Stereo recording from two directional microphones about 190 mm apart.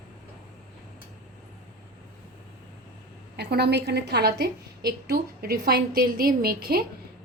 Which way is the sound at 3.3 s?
60° right (ahead or behind).